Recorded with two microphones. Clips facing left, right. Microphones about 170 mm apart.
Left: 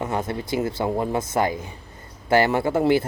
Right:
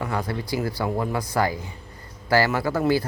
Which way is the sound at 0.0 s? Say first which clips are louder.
Left 1 dB; 25° left (ahead or behind).